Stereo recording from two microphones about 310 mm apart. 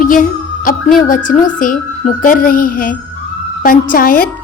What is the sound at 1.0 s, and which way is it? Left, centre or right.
A woman's voice, left.